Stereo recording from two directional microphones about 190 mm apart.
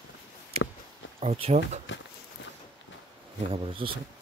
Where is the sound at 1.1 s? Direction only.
30° right (ahead or behind).